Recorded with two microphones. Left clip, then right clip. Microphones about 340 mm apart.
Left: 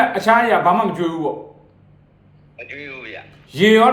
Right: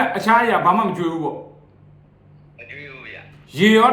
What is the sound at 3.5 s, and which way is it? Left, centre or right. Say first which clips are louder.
Speech: left 2 dB; centre.